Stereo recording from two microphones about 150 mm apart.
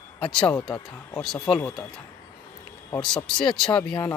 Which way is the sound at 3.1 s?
5° left (ahead or behind).